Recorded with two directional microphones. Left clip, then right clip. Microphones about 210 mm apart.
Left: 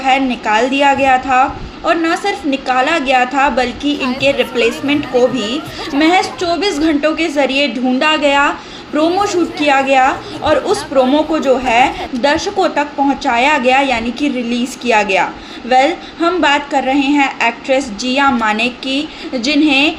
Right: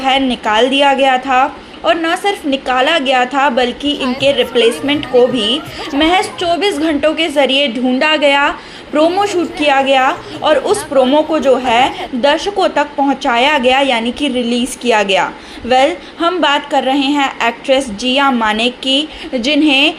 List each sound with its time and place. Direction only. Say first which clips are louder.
0.0 s a woman's voice: even; 30° right (ahead or behind)
3.9 s a woman's voice: even; centre (ahead or behind)
4.2 s a woman's voice: right 2 dB; 30° right (ahead or behind)
5.1 s a woman's voice: right 3 dB; centre (ahead or behind)
6.0 s a woman's voice: even; 25° right (ahead or behind)